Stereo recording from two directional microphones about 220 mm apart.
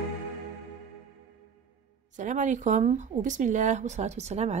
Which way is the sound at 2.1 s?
35° right (ahead or behind).